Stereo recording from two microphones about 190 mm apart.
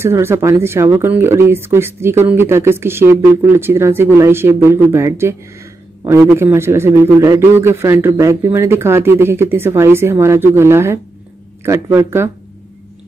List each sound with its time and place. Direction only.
0.0 s speech: 15° right (ahead or behind)